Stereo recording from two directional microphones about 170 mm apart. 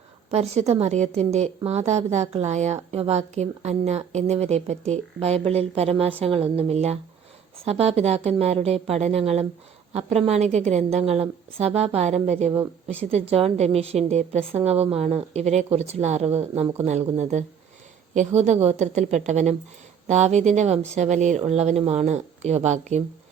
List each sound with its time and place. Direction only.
0.3 s a woman's voice: 40° right (ahead or behind)